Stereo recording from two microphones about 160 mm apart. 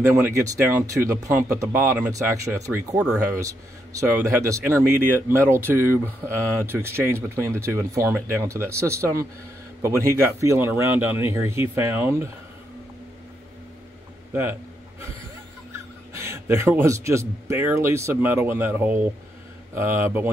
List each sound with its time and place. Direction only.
0.1 s speech: 20° right (ahead or behind)
16.1 s speech: 15° right (ahead or behind)